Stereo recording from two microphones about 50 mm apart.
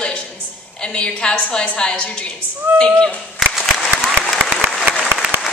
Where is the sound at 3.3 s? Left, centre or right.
Centre.